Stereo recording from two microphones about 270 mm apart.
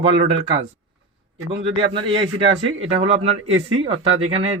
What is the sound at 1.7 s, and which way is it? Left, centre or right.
Speech, centre.